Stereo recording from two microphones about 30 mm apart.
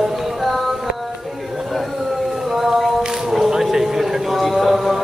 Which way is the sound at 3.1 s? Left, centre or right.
Centre.